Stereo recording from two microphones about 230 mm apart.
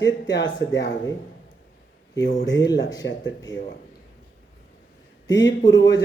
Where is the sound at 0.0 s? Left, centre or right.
Left.